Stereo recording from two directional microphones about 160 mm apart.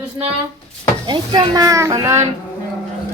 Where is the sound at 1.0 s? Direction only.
30° right (ahead or behind).